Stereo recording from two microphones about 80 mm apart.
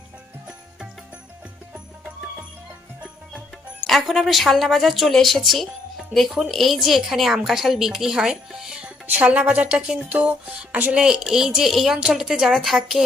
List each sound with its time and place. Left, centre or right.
3.0 s music: centre
3.8 s speech: centre
9.0 s speech: centre
10.9 s speech: centre